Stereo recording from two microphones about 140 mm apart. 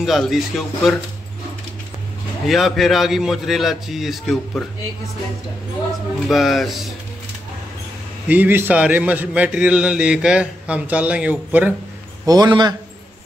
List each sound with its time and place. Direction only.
0.0 s a man's voice: centre (ahead or behind)
2.4 s a man's voice: centre (ahead or behind)
6.2 s a man's voice: centre (ahead or behind)
8.3 s a man's voice: 15° right (ahead or behind)
12.3 s a man's voice: 30° right (ahead or behind)